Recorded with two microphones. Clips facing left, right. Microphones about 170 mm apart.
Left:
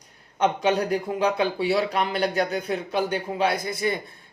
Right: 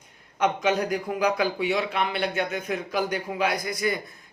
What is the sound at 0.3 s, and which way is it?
Speech, 30° left (ahead or behind).